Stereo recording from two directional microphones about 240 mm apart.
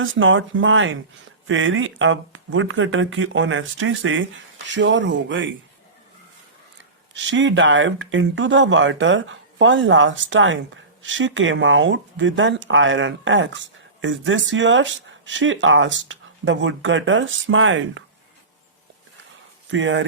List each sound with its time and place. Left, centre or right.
0.0 s speech: right
7.1 s speech: right
19.7 s speech: right